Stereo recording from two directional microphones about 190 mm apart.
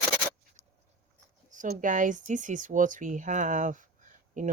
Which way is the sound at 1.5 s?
40° right (ahead or behind).